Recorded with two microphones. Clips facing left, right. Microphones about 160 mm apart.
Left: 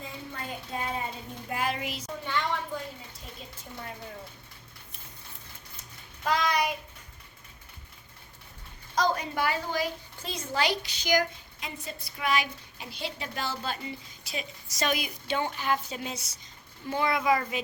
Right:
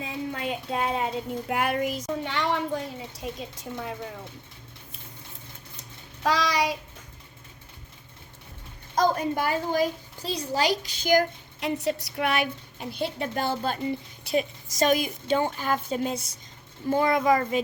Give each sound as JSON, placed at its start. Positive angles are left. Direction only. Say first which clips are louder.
{"t": 0.0, "sound": "child singing", "louder": "right 8 dB", "side_deg": -85}
{"t": 2.2, "sound": "a woman's voice", "louder": "right 1 dB", "side_deg": -70}
{"t": 6.2, "sound": "child singing", "louder": "right 2 dB", "side_deg": -90}
{"t": 9.0, "sound": "a woman's voice", "louder": "right 4 dB", "side_deg": -45}
{"t": 11.9, "sound": "a woman's voice", "louder": "right 1 dB", "side_deg": -75}